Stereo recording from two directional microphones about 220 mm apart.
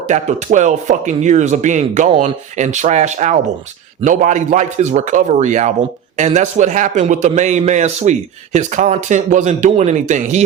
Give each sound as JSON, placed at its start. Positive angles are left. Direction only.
{"t": 0.1, "sound": "a man's voice", "side_deg": -35}